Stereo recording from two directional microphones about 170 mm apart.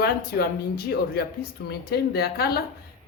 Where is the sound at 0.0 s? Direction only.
65° left (ahead or behind).